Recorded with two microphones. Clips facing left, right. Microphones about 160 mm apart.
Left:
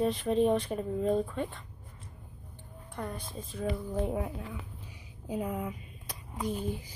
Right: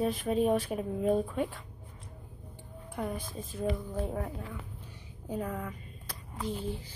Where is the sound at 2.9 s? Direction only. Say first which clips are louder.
Right 3 dB; 5° right (ahead or behind).